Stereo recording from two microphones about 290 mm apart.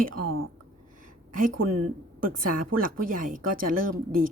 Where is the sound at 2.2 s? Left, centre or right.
Right.